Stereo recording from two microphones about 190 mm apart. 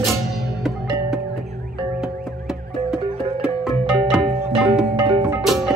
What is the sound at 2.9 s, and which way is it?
Music, 5° right (ahead or behind).